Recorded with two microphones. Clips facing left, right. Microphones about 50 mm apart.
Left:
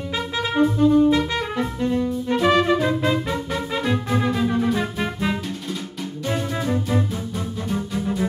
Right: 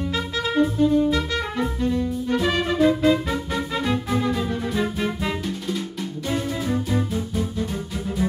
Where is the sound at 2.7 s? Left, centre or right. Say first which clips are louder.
Right 3 dB; centre.